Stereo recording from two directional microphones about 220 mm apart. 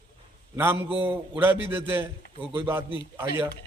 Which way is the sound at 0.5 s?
10° right (ahead or behind).